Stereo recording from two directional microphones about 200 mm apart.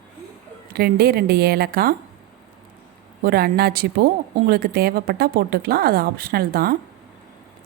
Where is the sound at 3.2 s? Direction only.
50° right (ahead or behind).